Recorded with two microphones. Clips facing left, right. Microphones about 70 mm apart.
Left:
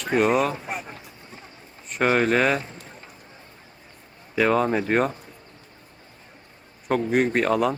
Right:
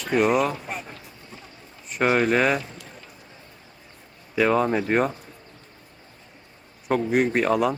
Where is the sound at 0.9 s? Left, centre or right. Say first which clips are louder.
Left 1 dB; left.